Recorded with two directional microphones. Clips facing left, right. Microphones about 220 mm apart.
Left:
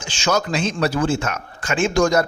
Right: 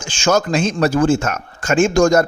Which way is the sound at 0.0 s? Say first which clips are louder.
Right 4 dB; 50° right (ahead or behind).